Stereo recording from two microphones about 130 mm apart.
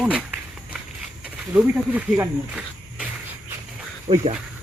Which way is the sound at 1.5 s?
10° right (ahead or behind).